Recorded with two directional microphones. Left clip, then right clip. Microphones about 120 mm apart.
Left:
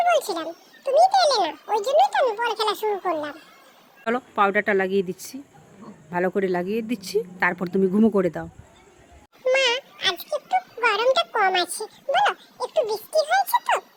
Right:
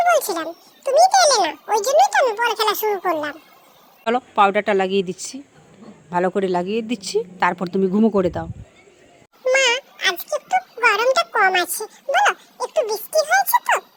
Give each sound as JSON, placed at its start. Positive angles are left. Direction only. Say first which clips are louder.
{"t": 0.3, "sound": "speech", "louder": "right 4 dB", "side_deg": -15}
{"t": 4.0, "sound": "speech", "louder": "right 5 dB", "side_deg": -5}
{"t": 9.4, "sound": "a sound", "louder": "right 3 dB", "side_deg": -15}
{"t": 13.1, "sound": "speech", "louder": "right 3 dB", "side_deg": -15}